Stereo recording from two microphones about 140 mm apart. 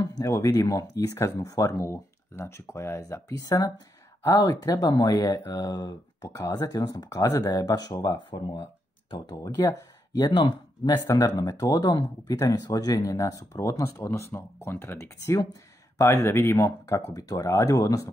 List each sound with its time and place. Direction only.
0.0 s speech: 25° left (ahead or behind)
8.3 s speech: 35° left (ahead or behind)